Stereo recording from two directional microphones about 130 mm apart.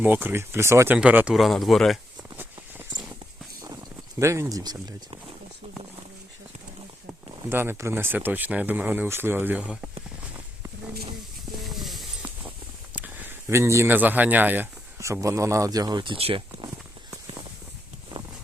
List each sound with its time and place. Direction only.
0.0 s speech: 15° right (ahead or behind)
0.9 s speech: 10° right (ahead or behind)
4.2 s speech: 20° right (ahead or behind)
7.5 s speech: 15° right (ahead or behind)
11.7 s a sound: centre (ahead or behind)
13.5 s speech: 20° right (ahead or behind); by 16.6 s 45° right (ahead or behind)